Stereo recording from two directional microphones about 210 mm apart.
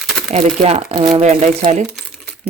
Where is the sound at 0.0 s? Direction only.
Centre (ahead or behind).